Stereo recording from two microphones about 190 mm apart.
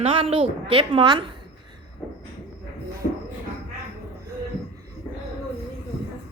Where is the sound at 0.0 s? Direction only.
30° right (ahead or behind).